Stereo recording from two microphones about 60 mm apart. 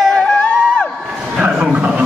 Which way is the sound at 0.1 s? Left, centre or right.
Centre.